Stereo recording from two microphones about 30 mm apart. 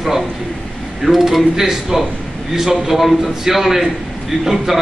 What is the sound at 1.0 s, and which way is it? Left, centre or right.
A man's voice, centre.